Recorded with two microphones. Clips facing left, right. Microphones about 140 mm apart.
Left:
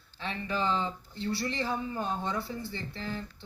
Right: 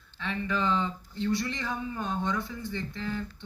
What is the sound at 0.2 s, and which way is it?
A man's voice, 30° left (ahead or behind).